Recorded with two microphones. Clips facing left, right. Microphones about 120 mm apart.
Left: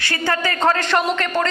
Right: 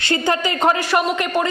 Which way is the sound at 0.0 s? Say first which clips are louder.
Right 2 dB; 20° right (ahead or behind).